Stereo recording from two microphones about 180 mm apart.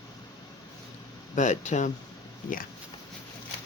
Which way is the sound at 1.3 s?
40° left (ahead or behind).